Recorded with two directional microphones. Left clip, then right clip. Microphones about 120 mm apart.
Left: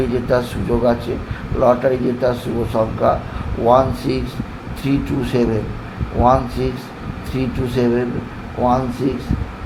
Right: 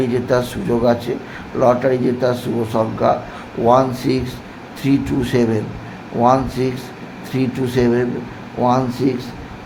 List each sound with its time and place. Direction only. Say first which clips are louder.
0.1 s speech: even; 30° right (ahead or behind)